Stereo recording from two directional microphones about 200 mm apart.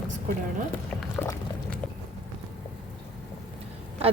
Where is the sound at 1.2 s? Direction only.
15° left (ahead or behind).